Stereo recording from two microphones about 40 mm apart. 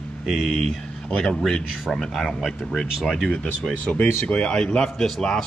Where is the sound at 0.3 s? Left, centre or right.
Centre.